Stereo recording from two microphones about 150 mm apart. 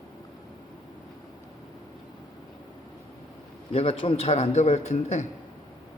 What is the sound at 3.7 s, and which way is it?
A man's voice, 40° left (ahead or behind).